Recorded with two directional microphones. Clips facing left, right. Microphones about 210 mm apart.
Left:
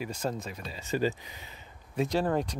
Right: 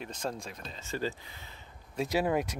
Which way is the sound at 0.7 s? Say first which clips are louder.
Left 6 dB; 15° left (ahead or behind).